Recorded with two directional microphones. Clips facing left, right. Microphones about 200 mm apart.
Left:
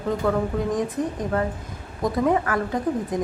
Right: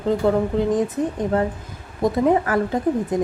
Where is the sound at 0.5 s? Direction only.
25° right (ahead or behind).